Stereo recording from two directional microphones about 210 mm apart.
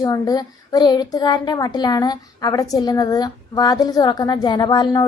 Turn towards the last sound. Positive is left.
turn(degrees=20)  # may be behind; listen again after turning